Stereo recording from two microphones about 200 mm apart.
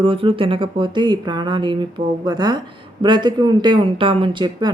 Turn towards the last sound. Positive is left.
turn(degrees=-20)  # may be behind; listen again after turning